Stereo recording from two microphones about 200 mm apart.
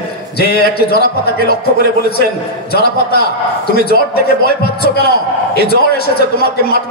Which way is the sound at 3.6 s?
50° left (ahead or behind).